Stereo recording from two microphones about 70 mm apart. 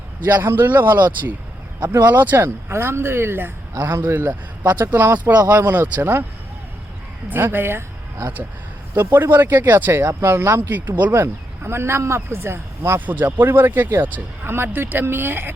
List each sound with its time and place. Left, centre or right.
0.4 s speech: right
7.3 s speech: right
10.1 s speech: right
10.3 s speech: right
11.1 s speech: right
13.1 s speech: right